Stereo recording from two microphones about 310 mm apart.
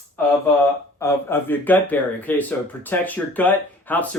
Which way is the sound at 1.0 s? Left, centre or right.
Centre.